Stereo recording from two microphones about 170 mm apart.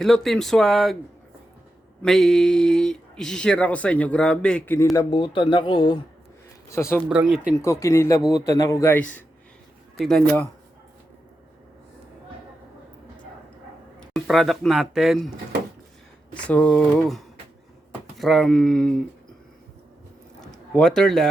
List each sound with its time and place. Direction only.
0.0 s speech: centre (ahead or behind)
2.0 s speech: centre (ahead or behind)
4.9 s speech: 30° left (ahead or behind)
7.1 s speech: 5° right (ahead or behind)
7.6 s speech: 15° left (ahead or behind)
14.0 s speech: centre (ahead or behind)
16.3 s speech: 5° left (ahead or behind)
20.4 s a sound: 5° left (ahead or behind)